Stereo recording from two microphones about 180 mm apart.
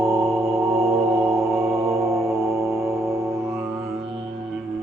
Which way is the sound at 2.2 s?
Centre (ahead or behind).